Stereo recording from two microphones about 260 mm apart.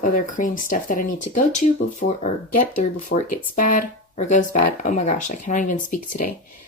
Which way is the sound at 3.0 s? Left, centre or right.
Left.